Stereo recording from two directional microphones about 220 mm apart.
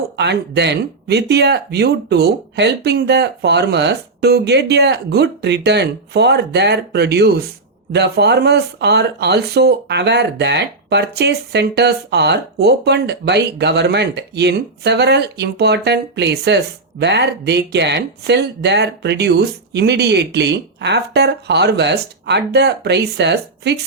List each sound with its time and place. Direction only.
0.2 s speech: 50° right (ahead or behind)